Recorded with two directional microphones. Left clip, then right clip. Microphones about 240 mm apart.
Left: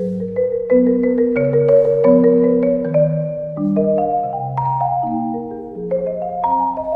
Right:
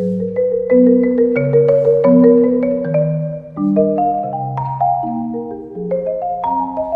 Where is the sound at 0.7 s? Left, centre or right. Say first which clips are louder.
Right 3 dB; centre.